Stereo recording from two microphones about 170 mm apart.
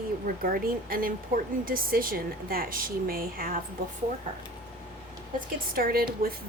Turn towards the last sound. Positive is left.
turn(degrees=-60)  # may be behind; listen again after turning